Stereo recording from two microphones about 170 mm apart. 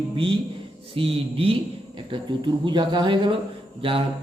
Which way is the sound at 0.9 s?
35° right (ahead or behind).